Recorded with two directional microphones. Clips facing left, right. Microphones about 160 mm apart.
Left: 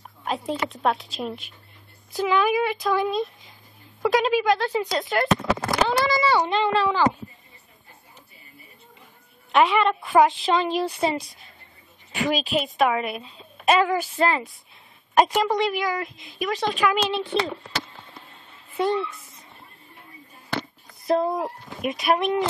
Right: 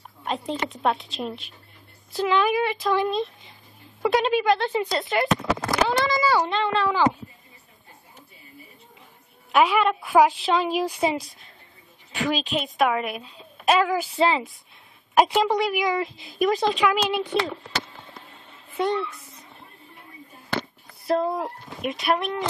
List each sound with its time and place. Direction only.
0.2 s speech: centre (ahead or behind)
9.5 s speech: 5° right (ahead or behind)
12.1 s speech: 5° left (ahead or behind)
15.1 s a woman's voice: 10° right (ahead or behind)
15.9 s speech: 35° right (ahead or behind)
16.8 s a woman's voice: 5° right (ahead or behind)
17.4 s speech: centre (ahead or behind)
18.7 s a sound: centre (ahead or behind)
21.2 s speech: 5° left (ahead or behind)